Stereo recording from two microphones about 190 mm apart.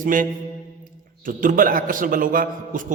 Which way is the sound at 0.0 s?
45° right (ahead or behind).